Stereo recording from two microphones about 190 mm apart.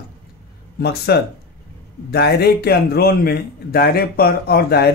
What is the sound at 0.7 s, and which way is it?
A man's voice, 60° left (ahead or behind).